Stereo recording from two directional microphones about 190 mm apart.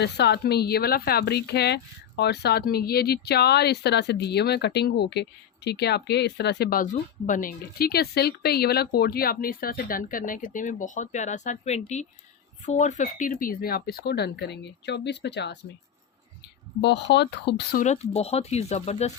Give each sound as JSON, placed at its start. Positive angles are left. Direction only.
{"t": 0.0, "sound": "speech", "side_deg": 60}
{"t": 16.8, "sound": "speech", "side_deg": 65}
{"t": 17.7, "sound": "speech", "side_deg": 35}